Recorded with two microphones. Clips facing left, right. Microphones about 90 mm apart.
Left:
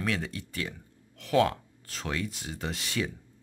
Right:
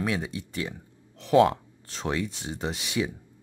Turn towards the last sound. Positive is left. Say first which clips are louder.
# right 3 dB
turn(degrees=-15)  # may be behind; listen again after turning